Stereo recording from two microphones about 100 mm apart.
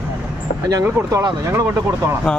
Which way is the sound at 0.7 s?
35° right (ahead or behind).